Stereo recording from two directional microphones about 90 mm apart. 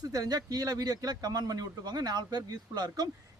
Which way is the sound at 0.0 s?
45° right (ahead or behind).